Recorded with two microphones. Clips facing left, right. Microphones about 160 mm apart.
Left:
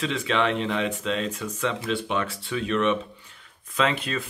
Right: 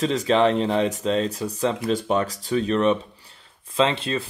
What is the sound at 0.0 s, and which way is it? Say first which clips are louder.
Speech: right 6 dB; 40° right (ahead or behind).